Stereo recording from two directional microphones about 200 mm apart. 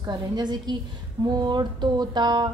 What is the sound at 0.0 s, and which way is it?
A woman's voice, 20° right (ahead or behind).